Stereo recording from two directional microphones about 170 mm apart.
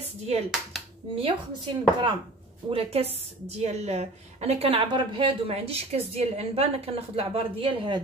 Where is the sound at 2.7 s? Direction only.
35° right (ahead or behind).